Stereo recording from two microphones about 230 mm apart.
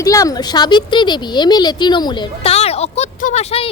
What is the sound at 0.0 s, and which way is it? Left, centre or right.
Speech, centre.